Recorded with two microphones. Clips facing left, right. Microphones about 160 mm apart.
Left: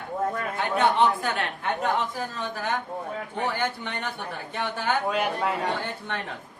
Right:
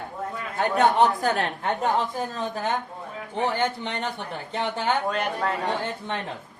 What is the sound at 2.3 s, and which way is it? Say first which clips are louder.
Speech: right 2 dB; 25° right (ahead or behind).